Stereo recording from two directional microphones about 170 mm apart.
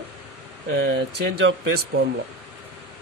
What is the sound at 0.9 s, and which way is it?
Speech, 90° right.